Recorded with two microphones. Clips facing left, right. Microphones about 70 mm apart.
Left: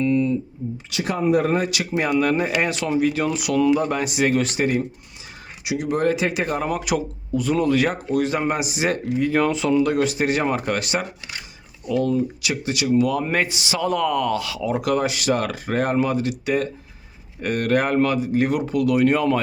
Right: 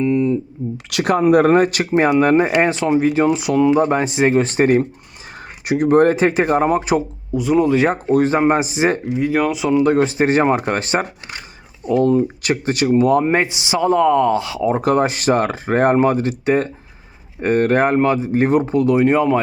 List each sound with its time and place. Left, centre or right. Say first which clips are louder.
0.0 s a sound: right 3 dB; right
0.9 s speech: right 7 dB; right
7.3 s speech: right 4 dB; centre
7.9 s speech: right 6 dB; right
9.1 s speech: right 2 dB; centre
9.8 s speech: right 5 dB; right